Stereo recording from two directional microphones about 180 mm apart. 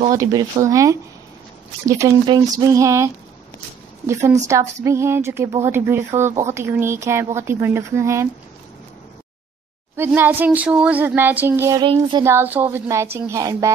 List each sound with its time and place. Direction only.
0.1 s a woman's voice: 20° right (ahead or behind)
9.9 s a woman's voice: 10° right (ahead or behind)
11.8 s a woman's voice: 25° right (ahead or behind)